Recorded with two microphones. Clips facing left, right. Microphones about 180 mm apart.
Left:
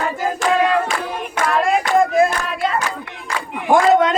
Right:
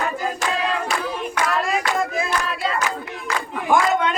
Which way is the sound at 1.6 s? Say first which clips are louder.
Left 7 dB; 50° left (ahead or behind).